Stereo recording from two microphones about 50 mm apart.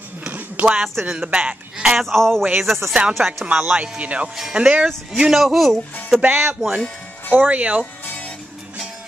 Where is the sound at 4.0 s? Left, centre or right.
Right.